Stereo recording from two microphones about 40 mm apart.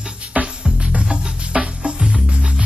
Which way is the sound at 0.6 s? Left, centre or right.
Right.